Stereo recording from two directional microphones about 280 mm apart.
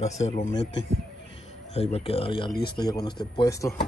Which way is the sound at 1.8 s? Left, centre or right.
Left.